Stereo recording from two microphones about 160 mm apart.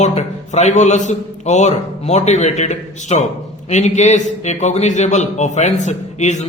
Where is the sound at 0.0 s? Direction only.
45° left (ahead or behind).